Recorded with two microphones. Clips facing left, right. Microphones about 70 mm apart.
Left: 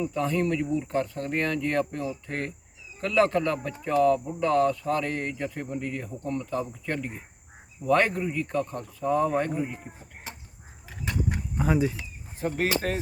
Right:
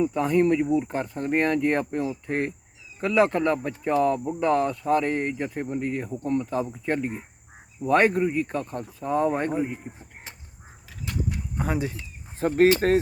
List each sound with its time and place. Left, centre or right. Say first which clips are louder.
0.0 s speech: right 5 dB; right
11.5 s speech: left 3 dB; centre
12.4 s speech: right 8 dB; right